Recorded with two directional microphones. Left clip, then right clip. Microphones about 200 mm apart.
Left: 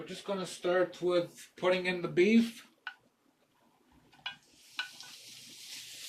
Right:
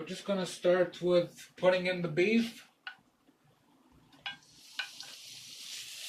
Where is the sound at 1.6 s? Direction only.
50° left (ahead or behind).